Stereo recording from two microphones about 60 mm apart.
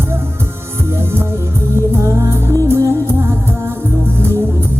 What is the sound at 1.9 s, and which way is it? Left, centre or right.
Music, right.